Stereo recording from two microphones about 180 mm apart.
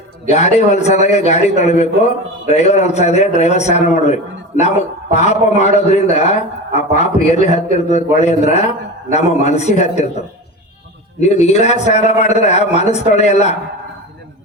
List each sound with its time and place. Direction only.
0.3 s a man's voice: 40° left (ahead or behind)